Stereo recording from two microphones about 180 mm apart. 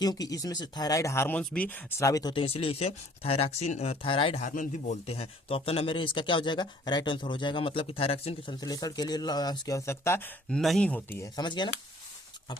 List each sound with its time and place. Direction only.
0.0 s speech: 20° left (ahead or behind)
8.6 s speech: 20° left (ahead or behind)
11.3 s speech: 25° left (ahead or behind)